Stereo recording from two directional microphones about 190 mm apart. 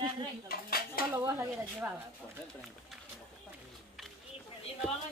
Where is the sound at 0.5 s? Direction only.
50° left (ahead or behind).